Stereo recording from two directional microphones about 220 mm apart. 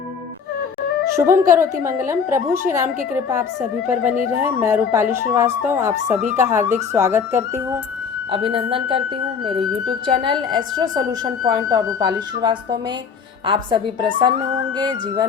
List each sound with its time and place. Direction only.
1.1 s speech: 10° right (ahead or behind)
4.4 s speech: 10° right (ahead or behind)
8.3 s speech: 25° right (ahead or behind)